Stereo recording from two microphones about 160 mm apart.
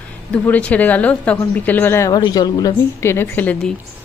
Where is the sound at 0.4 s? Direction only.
10° left (ahead or behind).